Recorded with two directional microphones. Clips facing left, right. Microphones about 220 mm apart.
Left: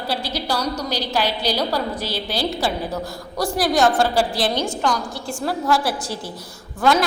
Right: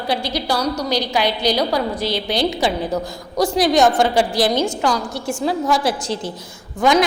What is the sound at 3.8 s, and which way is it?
Speech, 15° right (ahead or behind).